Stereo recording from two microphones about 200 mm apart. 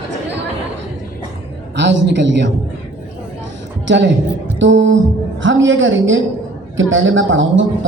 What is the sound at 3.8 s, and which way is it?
A woman's voice, 65° right (ahead or behind).